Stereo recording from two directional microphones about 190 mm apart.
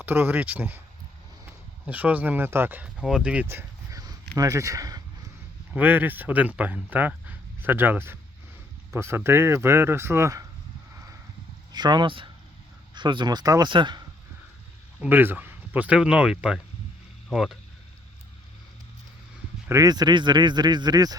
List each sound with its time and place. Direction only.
0.0 s speech: 10° right (ahead or behind)
1.9 s speech: 10° right (ahead or behind)
11.7 s speech: 20° right (ahead or behind)
14.9 s speech: 10° right (ahead or behind)
19.6 s speech: 15° right (ahead or behind)